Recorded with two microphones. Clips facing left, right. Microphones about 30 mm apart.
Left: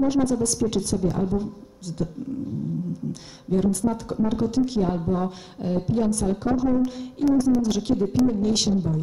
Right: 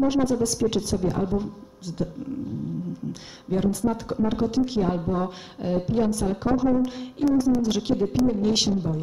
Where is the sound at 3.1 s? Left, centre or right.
Centre.